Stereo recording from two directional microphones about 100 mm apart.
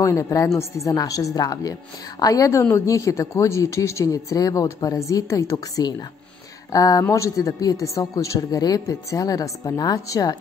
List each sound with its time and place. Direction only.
0.0 s speech: 30° left (ahead or behind)
5.5 s speech: 40° left (ahead or behind)